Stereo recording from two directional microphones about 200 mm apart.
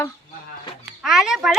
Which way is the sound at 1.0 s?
Centre (ahead or behind).